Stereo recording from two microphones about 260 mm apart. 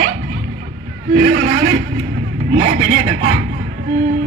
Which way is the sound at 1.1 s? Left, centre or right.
Right.